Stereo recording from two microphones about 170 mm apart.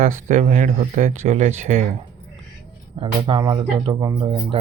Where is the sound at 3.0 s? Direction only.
30° right (ahead or behind).